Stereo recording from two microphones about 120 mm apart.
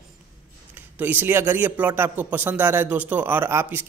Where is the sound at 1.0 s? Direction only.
15° right (ahead or behind).